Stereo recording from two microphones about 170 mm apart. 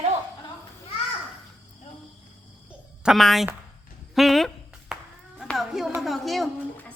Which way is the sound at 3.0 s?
Centre (ahead or behind).